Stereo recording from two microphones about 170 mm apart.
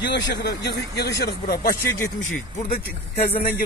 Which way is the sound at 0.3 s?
80° left.